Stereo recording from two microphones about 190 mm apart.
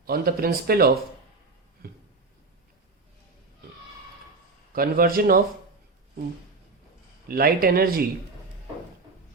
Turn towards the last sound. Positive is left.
turn(degrees=-50)  # may be behind; listen again after turning